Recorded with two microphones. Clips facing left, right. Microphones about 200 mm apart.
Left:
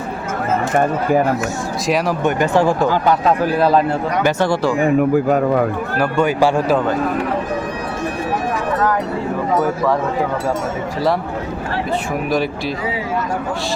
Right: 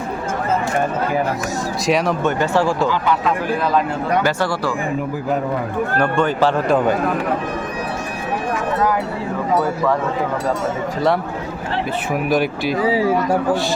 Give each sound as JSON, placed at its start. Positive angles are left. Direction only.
{"t": 2.2, "sound": "speech", "side_deg": 15}
{"t": 2.9, "sound": "a man's voice", "side_deg": 40}
{"t": 4.2, "sound": "speech", "side_deg": 25}
{"t": 4.9, "sound": "speech", "side_deg": 60}
{"t": 6.0, "sound": "speech", "side_deg": 10}
{"t": 12.3, "sound": "speech", "side_deg": 0}